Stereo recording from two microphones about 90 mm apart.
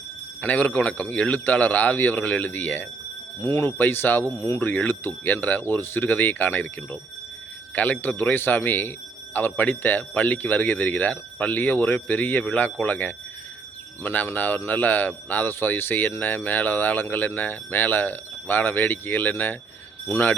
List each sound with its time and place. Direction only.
0.4 s speech: 15° left (ahead or behind)